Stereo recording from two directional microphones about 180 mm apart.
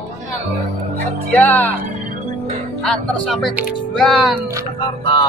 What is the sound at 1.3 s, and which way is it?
Music, 10° left (ahead or behind).